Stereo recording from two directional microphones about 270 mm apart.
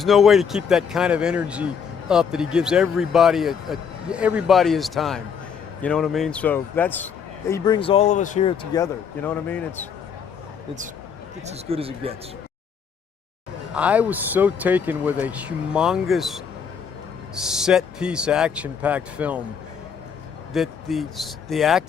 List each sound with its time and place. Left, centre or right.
0.0 s speech: centre
11.4 s speech: right
13.7 s speech: centre
20.5 s speech: centre